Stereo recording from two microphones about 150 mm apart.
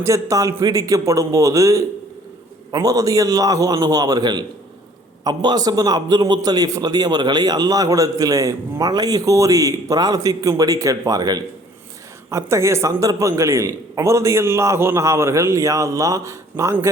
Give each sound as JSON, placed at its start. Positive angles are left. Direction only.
{"t": 0.0, "sound": "a man's voice", "side_deg": -20}